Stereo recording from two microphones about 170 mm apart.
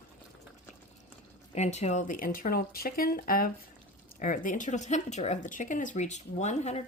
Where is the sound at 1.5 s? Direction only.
40° left (ahead or behind).